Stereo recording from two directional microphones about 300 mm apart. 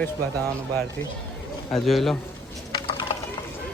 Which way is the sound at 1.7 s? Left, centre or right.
Centre.